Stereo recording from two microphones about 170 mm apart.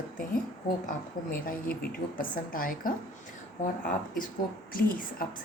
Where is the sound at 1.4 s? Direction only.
60° left (ahead or behind).